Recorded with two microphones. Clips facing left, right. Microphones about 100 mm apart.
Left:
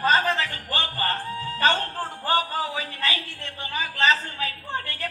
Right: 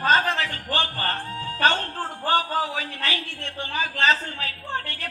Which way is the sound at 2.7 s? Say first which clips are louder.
Even; 65° right (ahead or behind).